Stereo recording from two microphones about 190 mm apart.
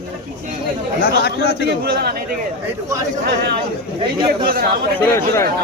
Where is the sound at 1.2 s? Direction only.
60° left (ahead or behind).